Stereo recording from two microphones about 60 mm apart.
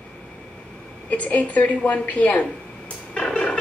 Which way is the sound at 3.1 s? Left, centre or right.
Centre.